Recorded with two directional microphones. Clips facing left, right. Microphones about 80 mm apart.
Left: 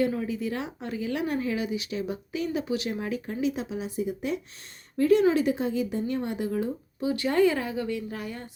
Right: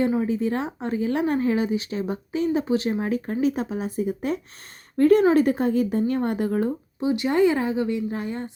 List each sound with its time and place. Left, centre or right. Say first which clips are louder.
0.0 s a woman's voice: right 5 dB; right
7.0 s speech: right 3 dB; right